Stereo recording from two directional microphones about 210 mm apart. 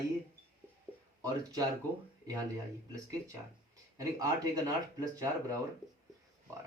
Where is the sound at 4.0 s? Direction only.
15° right (ahead or behind).